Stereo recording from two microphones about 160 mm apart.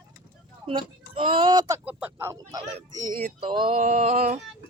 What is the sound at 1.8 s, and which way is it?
Speech, 10° right (ahead or behind).